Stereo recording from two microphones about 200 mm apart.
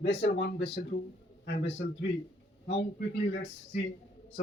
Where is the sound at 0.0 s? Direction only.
60° left (ahead or behind).